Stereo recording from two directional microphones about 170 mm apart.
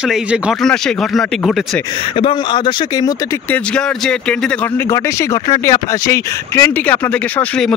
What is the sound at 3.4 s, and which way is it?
Speech, 5° left (ahead or behind).